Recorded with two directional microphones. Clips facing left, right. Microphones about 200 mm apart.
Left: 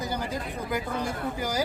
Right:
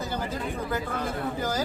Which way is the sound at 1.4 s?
10° left (ahead or behind).